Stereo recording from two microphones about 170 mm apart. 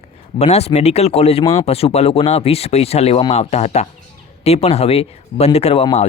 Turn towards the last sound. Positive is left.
turn(degrees=35)  # may be behind; listen again after turning